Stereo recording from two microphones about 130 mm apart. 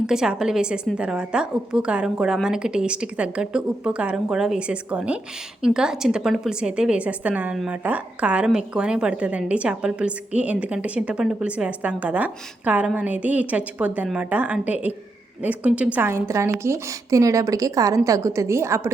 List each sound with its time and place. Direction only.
0.1 s a woman's voice: 5° right (ahead or behind); by 18.9 s 20° right (ahead or behind)